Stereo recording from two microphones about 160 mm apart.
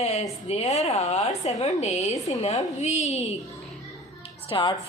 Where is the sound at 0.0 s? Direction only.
40° left (ahead or behind).